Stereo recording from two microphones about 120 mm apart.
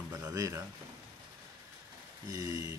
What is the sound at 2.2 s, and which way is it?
Speech, 30° right (ahead or behind).